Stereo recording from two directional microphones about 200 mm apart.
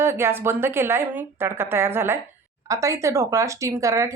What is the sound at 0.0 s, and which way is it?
Speech, 10° right (ahead or behind).